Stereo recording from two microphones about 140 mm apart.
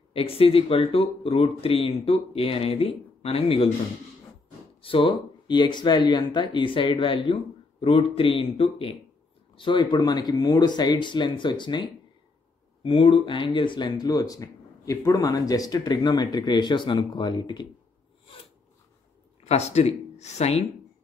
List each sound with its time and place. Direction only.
0.1 s speech: 40° left (ahead or behind)
4.8 s speech: 40° left (ahead or behind)
19.4 s speech: 50° left (ahead or behind)